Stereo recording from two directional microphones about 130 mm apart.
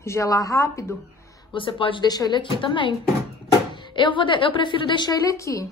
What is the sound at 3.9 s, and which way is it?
A woman's voice, 40° left (ahead or behind).